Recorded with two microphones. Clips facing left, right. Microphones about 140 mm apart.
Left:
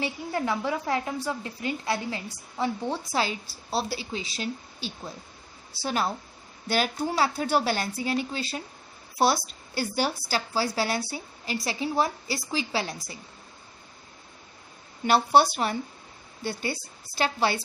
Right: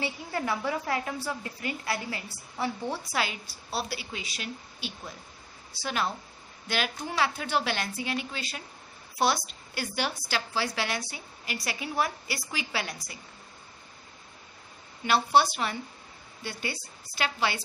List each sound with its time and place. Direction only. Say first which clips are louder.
0.0 s a woman's voice: left 3 dB; 15° left (ahead or behind)
15.0 s a woman's voice: left 3 dB; 40° left (ahead or behind)